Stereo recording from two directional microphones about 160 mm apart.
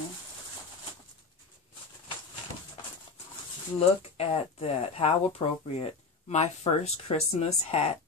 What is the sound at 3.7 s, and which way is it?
Speech, 40° left (ahead or behind).